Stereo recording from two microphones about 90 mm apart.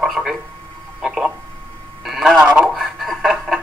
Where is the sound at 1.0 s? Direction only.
5° right (ahead or behind).